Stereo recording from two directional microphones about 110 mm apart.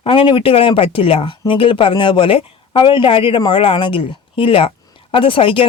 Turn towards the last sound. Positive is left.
turn(degrees=55)  # may be behind; listen again after turning